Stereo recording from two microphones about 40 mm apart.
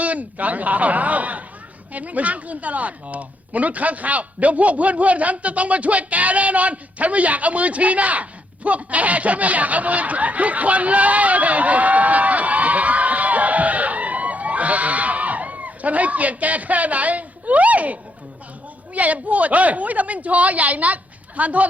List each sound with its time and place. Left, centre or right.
0.0 s a woman's voice: right